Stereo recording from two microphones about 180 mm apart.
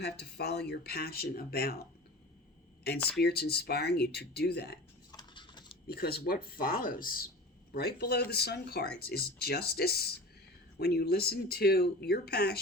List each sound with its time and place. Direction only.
0.0 s speech: 65° left (ahead or behind)
2.8 s speech: 60° left (ahead or behind)
5.1 s a sound: 25° left (ahead or behind)
5.9 s speech: 60° left (ahead or behind)